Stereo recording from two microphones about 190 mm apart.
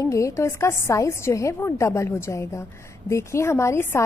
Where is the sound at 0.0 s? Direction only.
15° left (ahead or behind).